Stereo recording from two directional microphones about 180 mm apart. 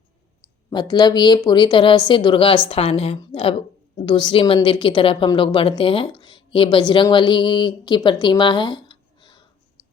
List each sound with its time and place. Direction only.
0.7 s a woman's voice: 25° left (ahead or behind)